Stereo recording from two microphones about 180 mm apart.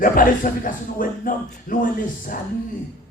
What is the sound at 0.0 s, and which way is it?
Speech, 50° left (ahead or behind).